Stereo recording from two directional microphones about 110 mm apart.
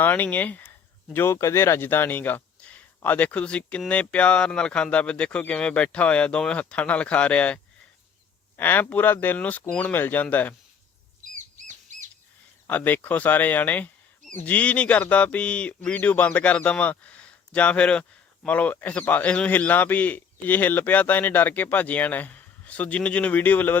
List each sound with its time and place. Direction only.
0.0 s speech: 15° left (ahead or behind)
12.6 s speech: 15° left (ahead or behind)